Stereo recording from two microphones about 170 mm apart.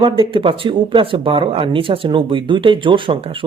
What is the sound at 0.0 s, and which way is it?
Speech, 30° right (ahead or behind).